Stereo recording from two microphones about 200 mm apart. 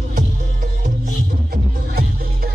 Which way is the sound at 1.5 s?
50° right (ahead or behind).